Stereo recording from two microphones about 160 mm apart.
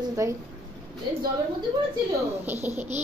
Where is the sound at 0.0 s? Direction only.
20° right (ahead or behind).